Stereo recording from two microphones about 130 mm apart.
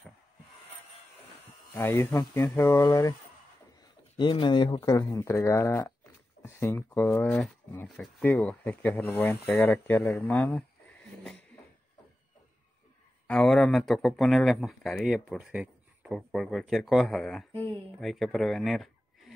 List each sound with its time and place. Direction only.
1.7 s speech: 20° left (ahead or behind)
4.2 s speech: 35° left (ahead or behind)
4.8 s speech: 25° left (ahead or behind)
13.3 s speech: 5° left (ahead or behind)